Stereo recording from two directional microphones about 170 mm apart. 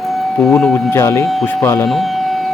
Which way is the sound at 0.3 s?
5° left (ahead or behind).